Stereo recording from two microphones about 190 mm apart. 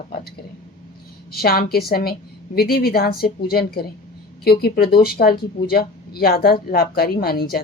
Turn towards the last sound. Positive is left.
turn(degrees=55)  # may be behind; listen again after turning